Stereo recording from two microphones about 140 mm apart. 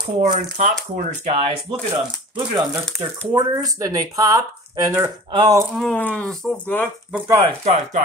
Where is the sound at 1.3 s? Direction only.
45° right (ahead or behind).